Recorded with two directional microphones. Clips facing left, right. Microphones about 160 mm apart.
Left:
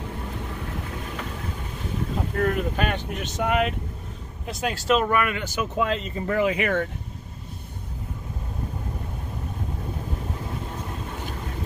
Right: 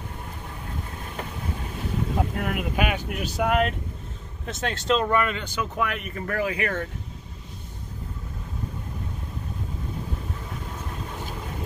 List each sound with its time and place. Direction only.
2.4 s speech: 10° right (ahead or behind); by 6.8 s 20° left (ahead or behind)